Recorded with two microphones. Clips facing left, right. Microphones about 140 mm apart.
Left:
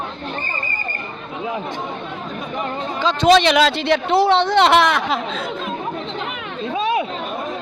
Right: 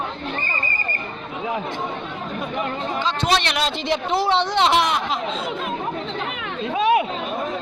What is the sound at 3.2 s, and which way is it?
Speech, 90° left.